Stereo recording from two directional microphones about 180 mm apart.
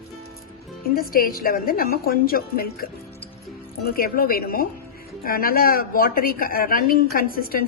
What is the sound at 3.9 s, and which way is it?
A woman's voice, 55° left (ahead or behind).